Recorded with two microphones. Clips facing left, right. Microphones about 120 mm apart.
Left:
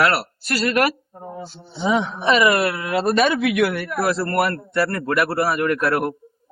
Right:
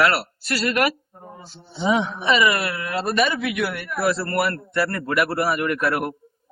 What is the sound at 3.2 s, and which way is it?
Speech, 85° left.